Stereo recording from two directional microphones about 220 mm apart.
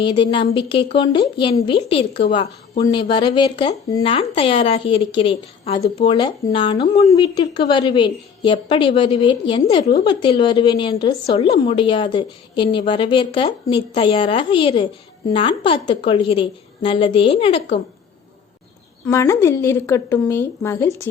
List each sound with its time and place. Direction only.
0.0 s a woman's voice: 20° left (ahead or behind)
7.1 s a woman's voice: 20° left (ahead or behind)
19.0 s speech: 15° left (ahead or behind)